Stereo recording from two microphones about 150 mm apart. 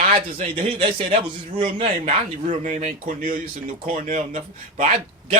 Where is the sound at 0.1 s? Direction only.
40° right (ahead or behind).